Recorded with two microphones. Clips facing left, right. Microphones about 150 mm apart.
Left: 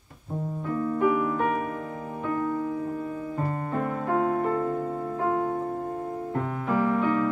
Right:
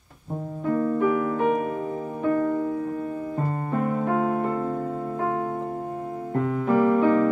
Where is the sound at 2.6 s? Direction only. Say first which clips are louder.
Right 2 dB; 40° right (ahead or behind).